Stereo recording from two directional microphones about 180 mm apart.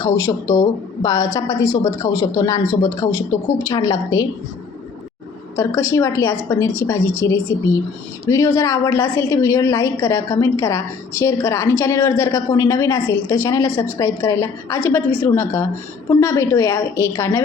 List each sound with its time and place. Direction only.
0.0 s a woman's voice: 20° left (ahead or behind)
5.5 s a woman's voice: 15° left (ahead or behind)